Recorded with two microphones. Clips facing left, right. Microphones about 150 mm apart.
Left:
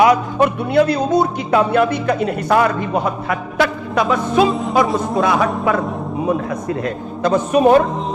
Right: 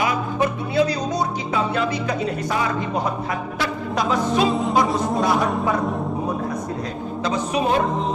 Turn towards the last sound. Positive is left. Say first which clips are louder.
# left 9 dB
turn(degrees=55)  # may be behind; listen again after turning